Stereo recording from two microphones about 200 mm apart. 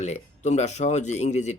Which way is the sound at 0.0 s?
35° left (ahead or behind).